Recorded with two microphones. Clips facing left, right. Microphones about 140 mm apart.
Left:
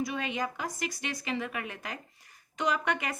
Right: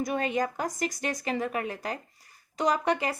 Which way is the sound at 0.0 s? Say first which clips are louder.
Right 5 dB; 45° right (ahead or behind).